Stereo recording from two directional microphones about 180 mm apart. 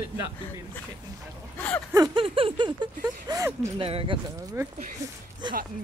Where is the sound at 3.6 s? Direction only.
30° right (ahead or behind).